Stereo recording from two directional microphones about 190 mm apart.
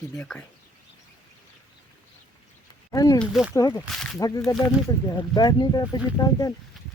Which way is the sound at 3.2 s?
Centre (ahead or behind).